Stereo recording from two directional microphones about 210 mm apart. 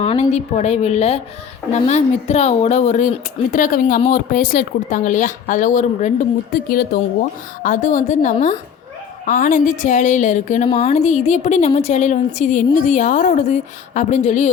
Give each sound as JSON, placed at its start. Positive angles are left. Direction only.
{"t": 0.0, "sound": "speech", "side_deg": 30}